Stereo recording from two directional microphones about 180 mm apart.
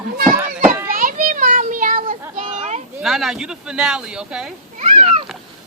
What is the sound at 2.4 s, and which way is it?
Children playing, 35° right (ahead or behind).